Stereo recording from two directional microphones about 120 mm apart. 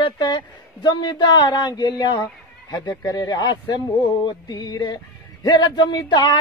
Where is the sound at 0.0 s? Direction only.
40° left (ahead or behind).